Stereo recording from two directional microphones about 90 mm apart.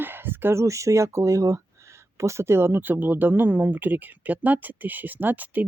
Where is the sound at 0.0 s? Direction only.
25° right (ahead or behind).